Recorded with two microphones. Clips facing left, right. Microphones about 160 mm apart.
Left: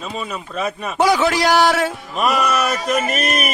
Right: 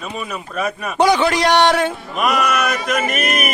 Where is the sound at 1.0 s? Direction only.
Centre (ahead or behind).